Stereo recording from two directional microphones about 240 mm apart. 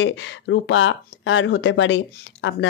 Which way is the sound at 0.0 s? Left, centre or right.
Left.